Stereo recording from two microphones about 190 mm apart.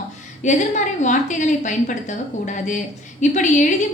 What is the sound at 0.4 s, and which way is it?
A woman's voice, 40° left (ahead or behind).